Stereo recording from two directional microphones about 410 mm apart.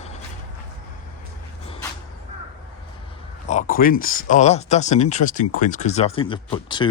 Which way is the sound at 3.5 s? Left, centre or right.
Centre.